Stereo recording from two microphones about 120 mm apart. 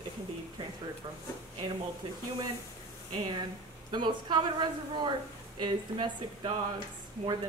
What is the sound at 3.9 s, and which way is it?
Speech, 40° right (ahead or behind).